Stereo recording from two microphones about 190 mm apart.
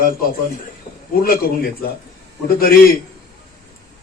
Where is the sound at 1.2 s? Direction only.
50° left (ahead or behind).